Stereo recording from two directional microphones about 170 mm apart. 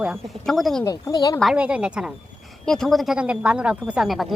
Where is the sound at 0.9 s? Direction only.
20° left (ahead or behind).